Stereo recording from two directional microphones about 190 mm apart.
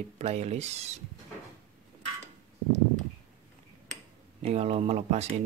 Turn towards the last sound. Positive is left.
turn(degrees=-35)  # may be behind; listen again after turning